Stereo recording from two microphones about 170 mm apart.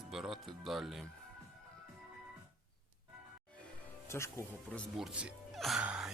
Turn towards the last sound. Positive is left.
turn(degrees=-5)  # may be behind; listen again after turning